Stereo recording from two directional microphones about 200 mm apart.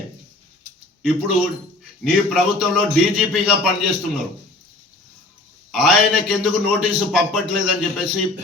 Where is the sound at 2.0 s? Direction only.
5° right (ahead or behind).